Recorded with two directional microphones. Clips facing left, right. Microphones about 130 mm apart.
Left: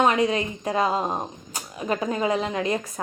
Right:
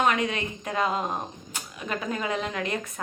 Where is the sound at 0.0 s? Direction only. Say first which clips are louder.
Left 4 dB; 30° left (ahead or behind).